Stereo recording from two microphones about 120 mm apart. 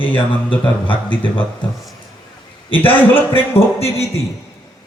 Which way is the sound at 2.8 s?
15° left (ahead or behind).